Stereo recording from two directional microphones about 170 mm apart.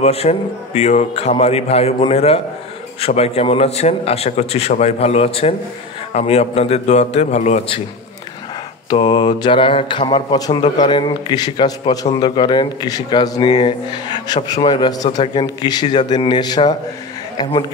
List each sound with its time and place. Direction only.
0.0 s a man's voice: 40° left (ahead or behind)
8.9 s speech: 25° left (ahead or behind)